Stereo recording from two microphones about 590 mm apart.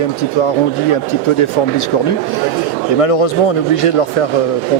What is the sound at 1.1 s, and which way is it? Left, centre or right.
Speech, left.